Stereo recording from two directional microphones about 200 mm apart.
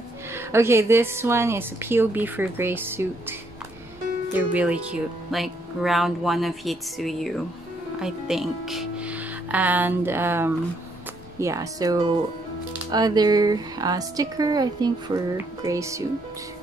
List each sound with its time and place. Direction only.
0.3 s a woman's voice: 10° right (ahead or behind)